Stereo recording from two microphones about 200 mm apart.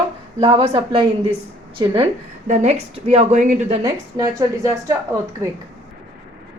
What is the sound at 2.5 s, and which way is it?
A woman's voice, 35° right (ahead or behind).